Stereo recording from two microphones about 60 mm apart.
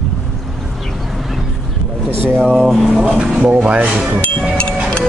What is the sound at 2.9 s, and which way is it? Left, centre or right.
Speech, centre.